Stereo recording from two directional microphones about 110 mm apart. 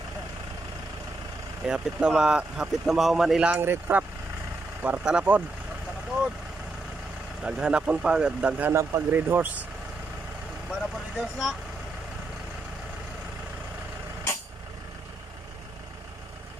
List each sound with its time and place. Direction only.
1.7 s speech: 5° right (ahead or behind)
3.6 s speech: 20° right (ahead or behind)
7.4 s speech: 10° right (ahead or behind)
10.7 s speech: centre (ahead or behind)